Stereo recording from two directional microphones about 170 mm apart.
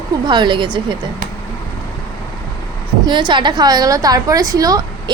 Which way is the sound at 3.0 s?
25° right (ahead or behind).